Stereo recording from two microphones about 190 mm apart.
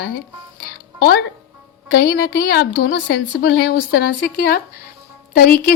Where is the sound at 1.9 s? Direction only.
55° left (ahead or behind).